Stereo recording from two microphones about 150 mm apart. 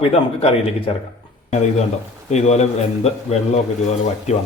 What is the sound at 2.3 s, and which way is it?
A man's voice, 45° left (ahead or behind).